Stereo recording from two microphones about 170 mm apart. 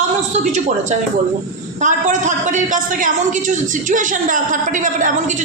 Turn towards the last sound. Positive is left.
turn(degrees=-45)  # may be behind; listen again after turning